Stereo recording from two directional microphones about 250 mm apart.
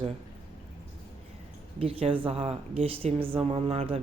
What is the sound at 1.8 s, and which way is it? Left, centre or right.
Speech, right.